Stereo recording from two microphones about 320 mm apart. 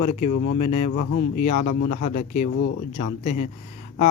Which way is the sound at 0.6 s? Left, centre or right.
Left.